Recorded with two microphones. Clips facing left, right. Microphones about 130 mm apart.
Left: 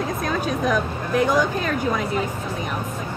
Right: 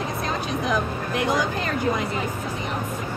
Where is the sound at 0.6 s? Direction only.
45° left (ahead or behind).